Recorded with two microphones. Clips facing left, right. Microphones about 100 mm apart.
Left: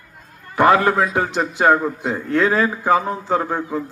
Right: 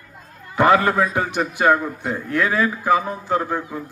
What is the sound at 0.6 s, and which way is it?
A man's voice, 20° left (ahead or behind).